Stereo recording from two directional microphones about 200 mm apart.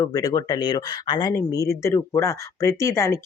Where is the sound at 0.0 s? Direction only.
15° left (ahead or behind).